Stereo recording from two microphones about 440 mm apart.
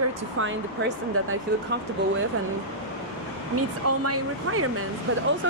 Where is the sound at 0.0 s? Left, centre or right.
Right.